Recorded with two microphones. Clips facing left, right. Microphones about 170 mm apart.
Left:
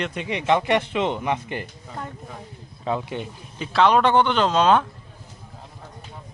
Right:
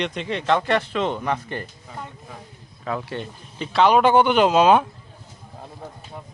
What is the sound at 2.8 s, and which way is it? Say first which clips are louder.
Speech: left 2 dB; 15° left (ahead or behind).